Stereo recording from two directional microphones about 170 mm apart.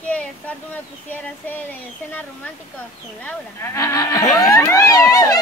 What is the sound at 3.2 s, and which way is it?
Speech, 15° left (ahead or behind).